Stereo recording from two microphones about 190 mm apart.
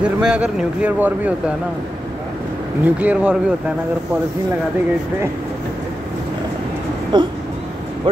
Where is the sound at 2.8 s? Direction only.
5° right (ahead or behind).